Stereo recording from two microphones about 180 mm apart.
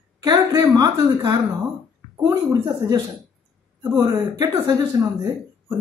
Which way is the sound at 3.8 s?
15° right (ahead or behind).